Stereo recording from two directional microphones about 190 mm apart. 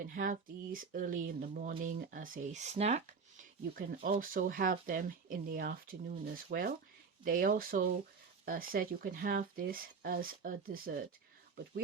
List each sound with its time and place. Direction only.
0.0 s speech: 45° right (ahead or behind)